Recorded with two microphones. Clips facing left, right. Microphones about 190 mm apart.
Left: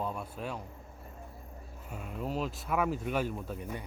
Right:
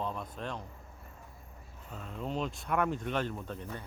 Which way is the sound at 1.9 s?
10° left (ahead or behind).